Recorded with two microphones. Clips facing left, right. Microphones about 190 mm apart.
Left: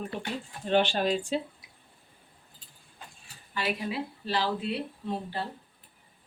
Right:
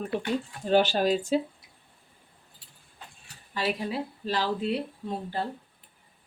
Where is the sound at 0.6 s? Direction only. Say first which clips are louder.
Right 2 dB; 40° right (ahead or behind).